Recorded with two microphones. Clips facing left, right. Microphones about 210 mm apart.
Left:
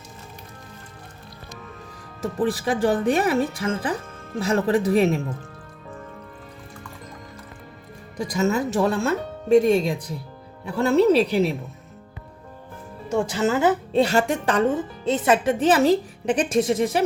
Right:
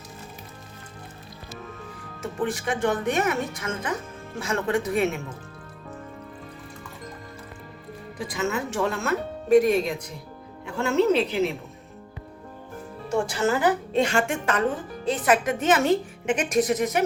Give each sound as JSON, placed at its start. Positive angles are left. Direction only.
{"t": 2.2, "sound": "speech", "side_deg": 35}
{"t": 8.2, "sound": "speech", "side_deg": 40}
{"t": 13.1, "sound": "a woman's voice", "side_deg": 20}
{"t": 14.0, "sound": "speech", "side_deg": 35}